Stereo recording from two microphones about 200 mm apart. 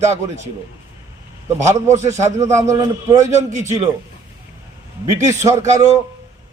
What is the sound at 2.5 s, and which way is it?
Speech, 15° right (ahead or behind).